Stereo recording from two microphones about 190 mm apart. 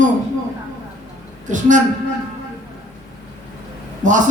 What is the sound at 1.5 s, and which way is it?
Speech, 40° right (ahead or behind).